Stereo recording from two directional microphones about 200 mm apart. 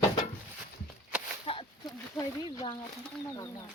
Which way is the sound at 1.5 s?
30° left (ahead or behind).